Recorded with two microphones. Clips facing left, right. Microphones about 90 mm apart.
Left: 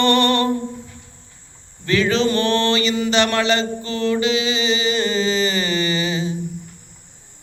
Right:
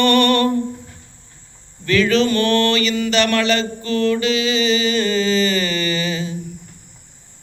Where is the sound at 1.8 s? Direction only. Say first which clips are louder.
Right 2 dB; 20° left (ahead or behind).